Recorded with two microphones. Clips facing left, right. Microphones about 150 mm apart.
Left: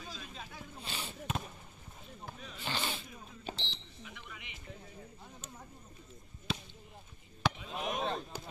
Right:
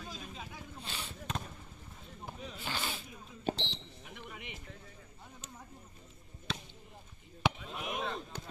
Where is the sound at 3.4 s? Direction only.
60° right (ahead or behind).